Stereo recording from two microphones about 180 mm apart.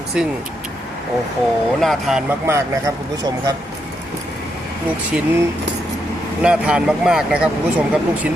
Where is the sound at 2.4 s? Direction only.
15° right (ahead or behind).